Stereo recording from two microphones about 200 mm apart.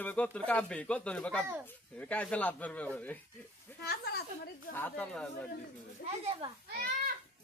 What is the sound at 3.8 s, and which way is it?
Speech, 50° left (ahead or behind).